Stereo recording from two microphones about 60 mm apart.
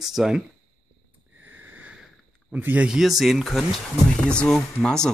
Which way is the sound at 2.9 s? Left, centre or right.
Centre.